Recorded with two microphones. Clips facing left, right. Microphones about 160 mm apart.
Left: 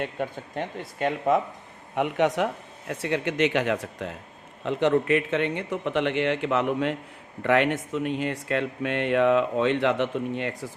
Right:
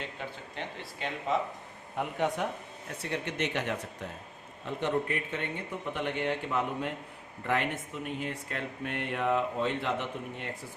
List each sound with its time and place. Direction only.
0.0 s speech: 50° left (ahead or behind)
2.0 s speech: 85° left